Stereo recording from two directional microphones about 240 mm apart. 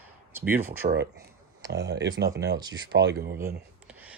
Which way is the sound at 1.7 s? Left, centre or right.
Right.